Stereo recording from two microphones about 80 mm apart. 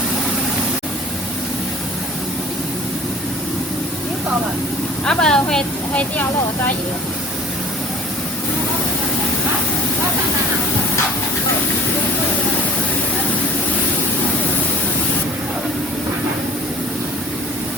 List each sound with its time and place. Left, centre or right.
5.0 s speech: centre
5.9 s speech: centre